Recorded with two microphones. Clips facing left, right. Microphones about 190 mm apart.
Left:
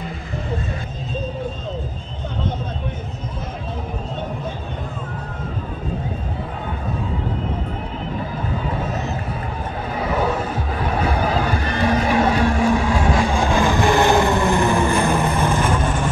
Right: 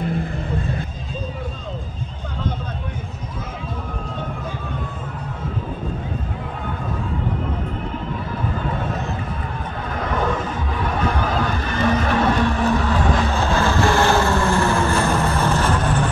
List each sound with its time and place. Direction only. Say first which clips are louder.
0.0 s music: right 7 dB; 55° right (ahead or behind)
9.9 s a sound: left 1 dB; 5° left (ahead or behind)
11.1 s music: left 2 dB; 10° left (ahead or behind)